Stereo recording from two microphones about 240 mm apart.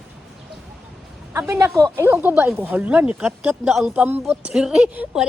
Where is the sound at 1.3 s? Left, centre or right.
Centre.